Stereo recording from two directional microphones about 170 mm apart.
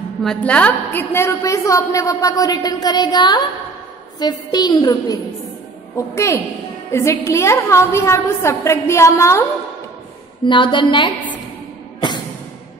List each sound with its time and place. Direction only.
0.2 s a woman's voice: 5° left (ahead or behind)
10.4 s a woman's voice: 30° left (ahead or behind)